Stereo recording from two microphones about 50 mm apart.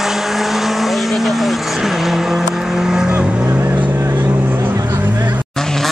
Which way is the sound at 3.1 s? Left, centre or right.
Right.